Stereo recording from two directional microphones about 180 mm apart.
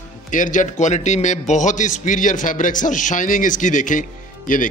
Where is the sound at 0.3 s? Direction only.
45° left (ahead or behind).